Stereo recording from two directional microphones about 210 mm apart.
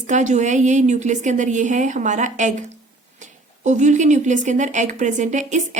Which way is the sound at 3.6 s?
35° right (ahead or behind).